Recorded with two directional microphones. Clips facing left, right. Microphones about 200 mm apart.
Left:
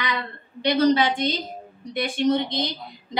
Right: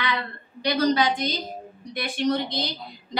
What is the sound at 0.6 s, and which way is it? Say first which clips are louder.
A woman's voice: left 3 dB; 25° left (ahead or behind).